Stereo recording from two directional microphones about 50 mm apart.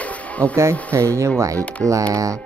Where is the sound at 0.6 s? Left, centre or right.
Right.